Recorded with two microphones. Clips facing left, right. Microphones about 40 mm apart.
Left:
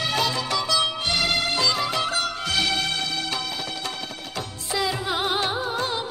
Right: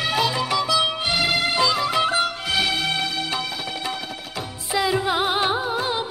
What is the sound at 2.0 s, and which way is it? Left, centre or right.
Music, centre.